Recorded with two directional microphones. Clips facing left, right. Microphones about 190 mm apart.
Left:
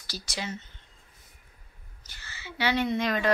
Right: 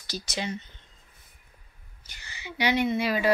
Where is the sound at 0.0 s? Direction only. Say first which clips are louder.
Right 3 dB; 20° right (ahead or behind).